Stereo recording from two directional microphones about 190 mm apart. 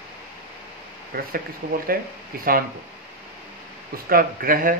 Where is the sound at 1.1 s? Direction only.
50° right (ahead or behind).